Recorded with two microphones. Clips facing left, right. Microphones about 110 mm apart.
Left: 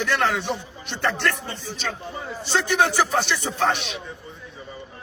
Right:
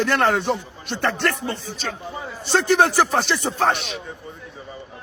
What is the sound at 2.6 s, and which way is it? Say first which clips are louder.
Speech: right 4 dB; 40° right (ahead or behind).